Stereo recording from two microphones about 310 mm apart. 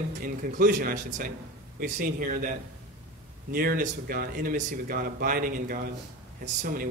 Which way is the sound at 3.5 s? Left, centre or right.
Right.